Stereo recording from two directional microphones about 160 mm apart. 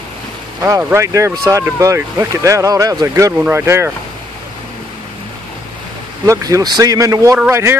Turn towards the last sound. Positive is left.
turn(degrees=-15)  # may be behind; listen again after turning